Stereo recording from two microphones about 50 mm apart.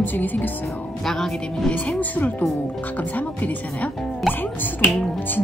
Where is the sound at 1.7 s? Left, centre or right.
Left.